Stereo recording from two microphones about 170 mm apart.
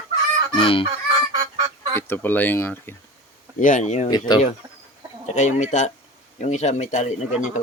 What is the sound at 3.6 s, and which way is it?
Speech, 45° left (ahead or behind).